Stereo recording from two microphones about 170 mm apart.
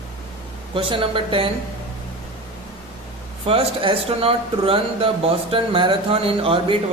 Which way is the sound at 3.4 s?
35° right (ahead or behind).